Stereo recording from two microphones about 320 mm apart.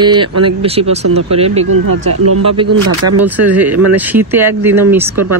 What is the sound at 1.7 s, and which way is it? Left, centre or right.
Speech, right.